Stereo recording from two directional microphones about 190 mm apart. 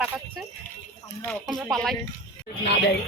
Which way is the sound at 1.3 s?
Centre (ahead or behind).